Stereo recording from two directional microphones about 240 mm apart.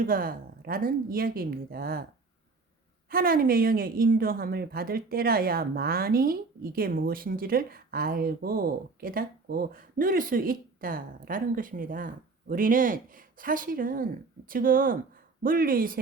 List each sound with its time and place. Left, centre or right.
0.0 s a woman's voice: right
3.1 s a woman's voice: right